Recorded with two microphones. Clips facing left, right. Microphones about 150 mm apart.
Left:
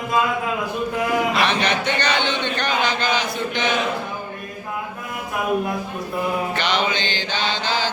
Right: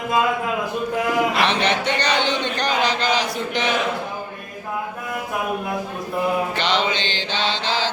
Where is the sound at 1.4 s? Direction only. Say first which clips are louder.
Right 1 dB; 30° right (ahead or behind).